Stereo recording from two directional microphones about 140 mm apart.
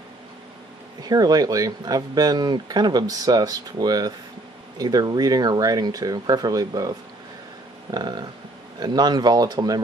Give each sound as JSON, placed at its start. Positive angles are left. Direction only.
{"t": 1.0, "sound": "speech", "side_deg": -30}